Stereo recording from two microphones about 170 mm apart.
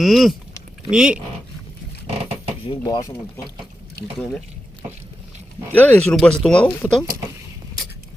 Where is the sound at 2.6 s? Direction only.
30° left (ahead or behind).